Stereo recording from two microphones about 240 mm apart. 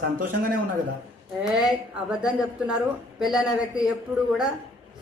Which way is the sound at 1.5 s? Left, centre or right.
Centre.